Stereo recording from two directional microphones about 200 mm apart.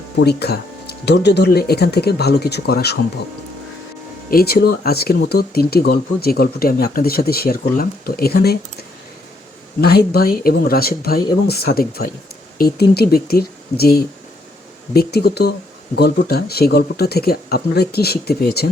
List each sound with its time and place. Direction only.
0.2 s speech: 55° left (ahead or behind)
4.3 s speech: 50° left (ahead or behind)
9.8 s speech: 50° left (ahead or behind)